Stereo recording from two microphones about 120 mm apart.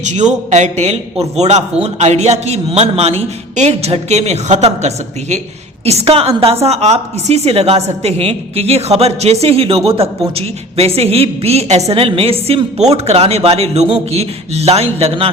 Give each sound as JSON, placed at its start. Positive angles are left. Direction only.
{"t": 0.0, "sound": "a woman's voice", "side_deg": -80}